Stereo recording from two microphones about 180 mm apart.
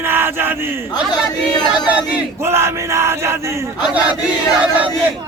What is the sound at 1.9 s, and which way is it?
Speech, 5° right (ahead or behind).